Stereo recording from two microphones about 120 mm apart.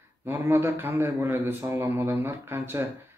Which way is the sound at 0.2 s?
20° right (ahead or behind).